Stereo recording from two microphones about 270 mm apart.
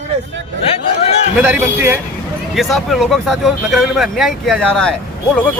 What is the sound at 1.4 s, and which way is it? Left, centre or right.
Speech, centre.